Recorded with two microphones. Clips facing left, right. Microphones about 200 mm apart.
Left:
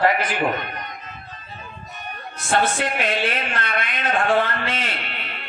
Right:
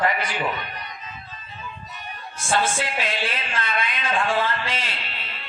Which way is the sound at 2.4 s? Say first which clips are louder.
Left 2 dB; 60° left (ahead or behind).